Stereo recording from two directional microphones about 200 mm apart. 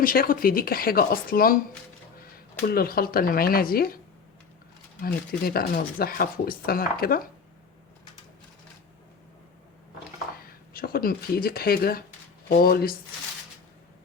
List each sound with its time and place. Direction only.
0.0 s speech: 45° left (ahead or behind)
2.6 s speech: 50° left (ahead or behind)
5.5 s speech: 50° left (ahead or behind)
10.3 s speech: 50° left (ahead or behind)